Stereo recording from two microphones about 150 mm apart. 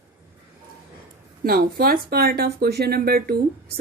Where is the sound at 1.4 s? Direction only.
90° right.